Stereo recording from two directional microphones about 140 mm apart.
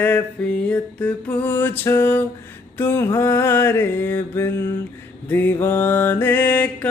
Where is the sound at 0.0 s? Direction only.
10° left (ahead or behind).